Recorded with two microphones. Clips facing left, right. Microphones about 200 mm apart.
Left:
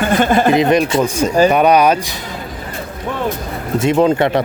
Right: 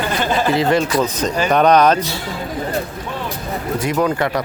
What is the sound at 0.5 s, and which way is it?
Speech, 20° left (ahead or behind).